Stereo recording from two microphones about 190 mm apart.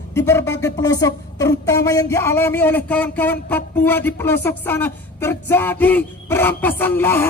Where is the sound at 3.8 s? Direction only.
10° left (ahead or behind).